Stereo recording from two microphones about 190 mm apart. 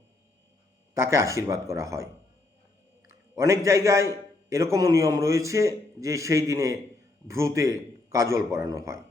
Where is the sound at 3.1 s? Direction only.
15° right (ahead or behind).